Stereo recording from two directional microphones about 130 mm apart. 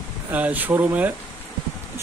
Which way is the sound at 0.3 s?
10° right (ahead or behind).